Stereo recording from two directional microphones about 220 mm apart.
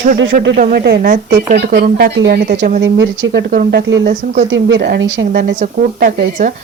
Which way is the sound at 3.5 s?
40° right (ahead or behind).